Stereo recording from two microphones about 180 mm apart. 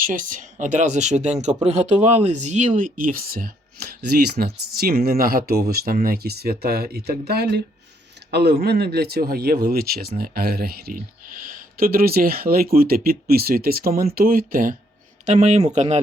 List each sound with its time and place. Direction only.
0.0 s speech: 45° right (ahead or behind)
15.3 s speech: 40° right (ahead or behind)